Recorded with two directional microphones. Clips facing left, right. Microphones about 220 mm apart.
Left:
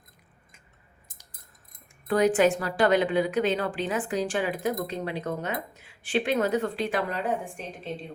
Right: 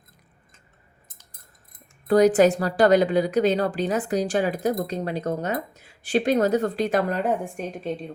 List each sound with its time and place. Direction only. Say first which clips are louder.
2.0 s a woman's voice: right 5 dB; 40° right (ahead or behind)